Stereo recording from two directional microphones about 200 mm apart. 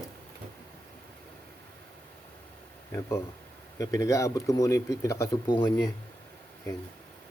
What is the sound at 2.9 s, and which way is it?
Speech, 15° left (ahead or behind).